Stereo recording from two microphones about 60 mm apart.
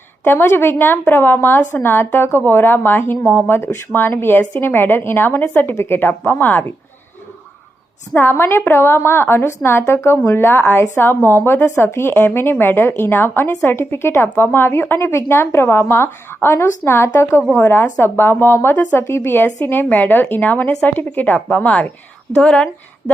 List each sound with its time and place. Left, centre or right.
0.3 s speech: left
8.1 s a woman's voice: left; by 22.7 s centre